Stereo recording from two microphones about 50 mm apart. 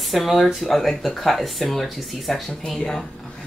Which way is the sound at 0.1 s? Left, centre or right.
Centre.